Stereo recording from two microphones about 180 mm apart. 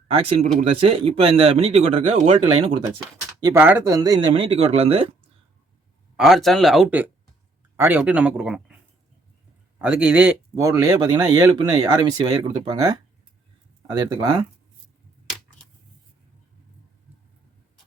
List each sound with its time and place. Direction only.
0.1 s speech: 35° right (ahead or behind)
3.4 s speech: 10° right (ahead or behind); by 5.0 s 35° right (ahead or behind)
6.1 s speech: centre (ahead or behind)
9.7 s speech: 10° right (ahead or behind)